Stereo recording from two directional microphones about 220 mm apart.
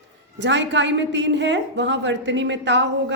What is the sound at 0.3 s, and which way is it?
A woman's voice, 55° right (ahead or behind).